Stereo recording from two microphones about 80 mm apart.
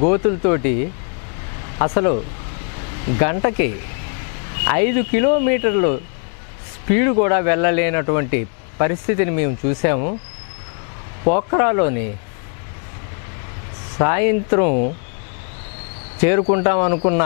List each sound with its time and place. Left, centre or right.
0.0 s speech: left
11.2 s speech: centre
13.9 s speech: left
16.2 s speech: centre